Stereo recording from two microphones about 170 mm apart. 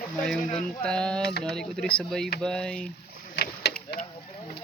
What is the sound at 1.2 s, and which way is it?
Speech, 70° left (ahead or behind).